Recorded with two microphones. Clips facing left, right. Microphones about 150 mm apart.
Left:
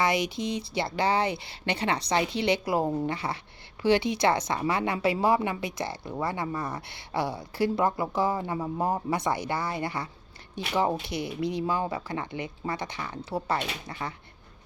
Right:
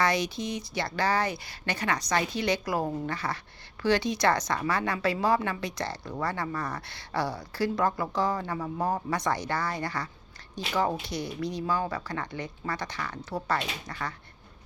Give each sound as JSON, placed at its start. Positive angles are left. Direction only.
{"t": 0.0, "sound": "a woman's voice", "side_deg": 20}
{"t": 11.1, "sound": "a woman's voice", "side_deg": 20}